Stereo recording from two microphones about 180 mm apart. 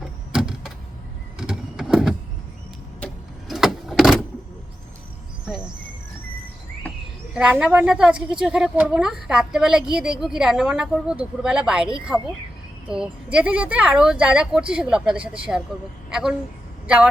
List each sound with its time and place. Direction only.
0.3 s vehicle: 5° right (ahead or behind)
1.4 s power windows: 5° right (ahead or behind)
3.5 s vehicle: centre (ahead or behind)
7.3 s a woman's voice: 5° right (ahead or behind)
12.9 s a woman's voice: 5° right (ahead or behind)